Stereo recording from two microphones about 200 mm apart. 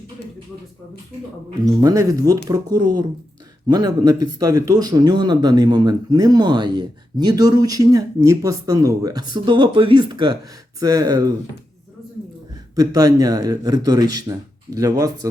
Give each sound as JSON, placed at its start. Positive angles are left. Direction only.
{"t": 1.6, "sound": "speech", "side_deg": -15}
{"t": 12.7, "sound": "speech", "side_deg": -20}